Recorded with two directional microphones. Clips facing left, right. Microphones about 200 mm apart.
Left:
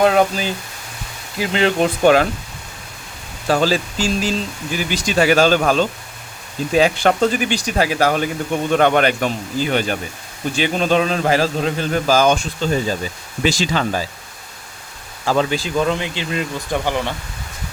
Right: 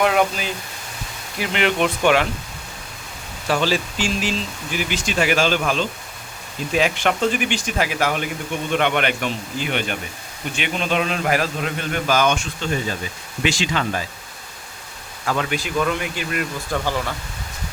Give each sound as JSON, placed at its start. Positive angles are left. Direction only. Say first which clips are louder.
{"t": 0.0, "sound": "a man's voice", "louder": "left 4 dB", "side_deg": 35}
{"t": 3.4, "sound": "a man's voice", "louder": "left 4 dB", "side_deg": 40}
{"t": 15.3, "sound": "speech", "louder": "left 5 dB", "side_deg": 30}